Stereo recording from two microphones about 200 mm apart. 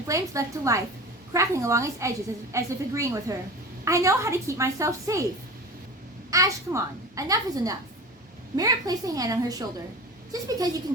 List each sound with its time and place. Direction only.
0.1 s a woman's voice: 15° right (ahead or behind)
6.3 s a woman's voice: 15° right (ahead or behind)